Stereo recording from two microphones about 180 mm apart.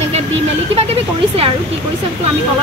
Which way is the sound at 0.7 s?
30° right (ahead or behind).